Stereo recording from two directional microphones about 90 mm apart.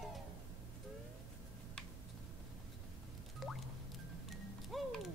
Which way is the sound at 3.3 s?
Centre (ahead or behind).